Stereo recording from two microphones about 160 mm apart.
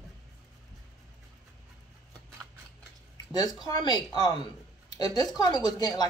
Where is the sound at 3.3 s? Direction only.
25° left (ahead or behind).